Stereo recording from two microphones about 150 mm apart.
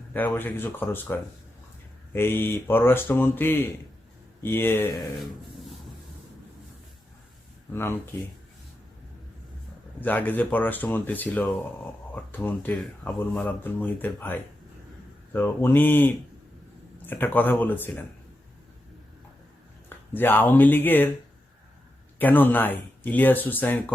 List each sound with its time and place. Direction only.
0.1 s speech: 10° left (ahead or behind)
7.7 s speech: 15° left (ahead or behind)
10.0 s speech: 10° left (ahead or behind)
20.1 s speech: 10° left (ahead or behind)
22.2 s speech: 10° left (ahead or behind)